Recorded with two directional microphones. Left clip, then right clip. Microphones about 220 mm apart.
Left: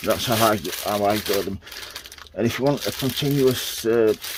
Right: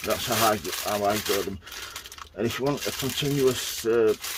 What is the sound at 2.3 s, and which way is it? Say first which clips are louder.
Speech: left 5 dB; 30° left (ahead or behind).